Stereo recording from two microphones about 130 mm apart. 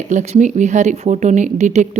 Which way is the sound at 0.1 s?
65° right (ahead or behind).